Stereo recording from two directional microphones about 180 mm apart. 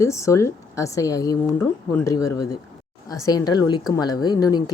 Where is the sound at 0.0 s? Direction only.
15° left (ahead or behind).